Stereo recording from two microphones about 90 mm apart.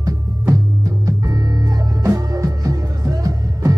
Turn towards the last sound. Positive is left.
turn(degrees=-40)  # may be behind; listen again after turning